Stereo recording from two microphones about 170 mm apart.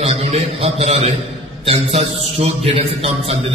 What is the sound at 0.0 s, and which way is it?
A man's voice, 40° right (ahead or behind).